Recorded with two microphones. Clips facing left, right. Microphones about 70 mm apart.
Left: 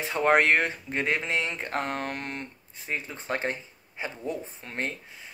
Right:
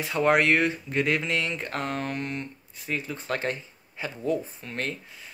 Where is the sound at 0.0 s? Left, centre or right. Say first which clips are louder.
Even; left.